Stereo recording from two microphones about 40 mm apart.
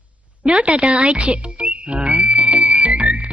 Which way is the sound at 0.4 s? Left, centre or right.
Right.